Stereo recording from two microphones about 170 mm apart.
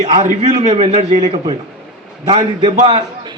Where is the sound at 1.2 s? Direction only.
25° right (ahead or behind).